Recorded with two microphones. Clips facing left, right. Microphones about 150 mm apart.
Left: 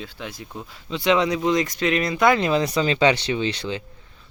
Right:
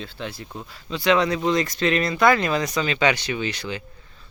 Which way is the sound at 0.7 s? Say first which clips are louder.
Even; 20° left (ahead or behind).